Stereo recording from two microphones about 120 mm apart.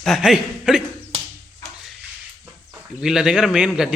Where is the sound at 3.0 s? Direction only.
5° right (ahead or behind).